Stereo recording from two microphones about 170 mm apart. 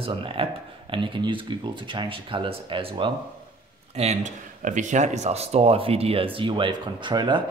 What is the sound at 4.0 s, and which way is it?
Speech, 45° right (ahead or behind).